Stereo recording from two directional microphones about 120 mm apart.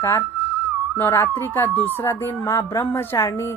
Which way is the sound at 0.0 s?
25° left (ahead or behind).